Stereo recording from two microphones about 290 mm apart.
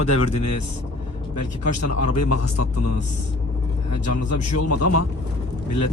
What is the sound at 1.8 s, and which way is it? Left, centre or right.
A man's voice, left.